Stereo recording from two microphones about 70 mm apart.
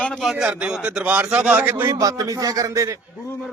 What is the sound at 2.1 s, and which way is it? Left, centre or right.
Speech, right.